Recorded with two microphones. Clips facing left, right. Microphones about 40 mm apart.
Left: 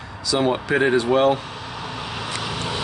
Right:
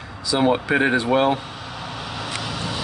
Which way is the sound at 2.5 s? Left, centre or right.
Left.